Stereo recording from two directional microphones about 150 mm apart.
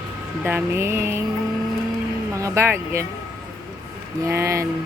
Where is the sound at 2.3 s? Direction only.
20° right (ahead or behind).